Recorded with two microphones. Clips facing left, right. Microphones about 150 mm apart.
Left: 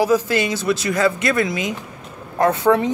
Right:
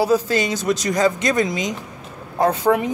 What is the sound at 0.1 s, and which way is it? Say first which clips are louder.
Speech: even; 15° right (ahead or behind).